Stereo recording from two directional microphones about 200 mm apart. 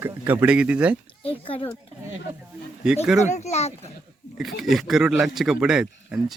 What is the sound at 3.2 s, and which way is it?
Speech, 35° left (ahead or behind).